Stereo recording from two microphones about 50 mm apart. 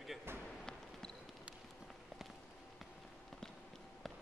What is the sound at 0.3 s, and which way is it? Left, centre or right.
Basketball bounce, right.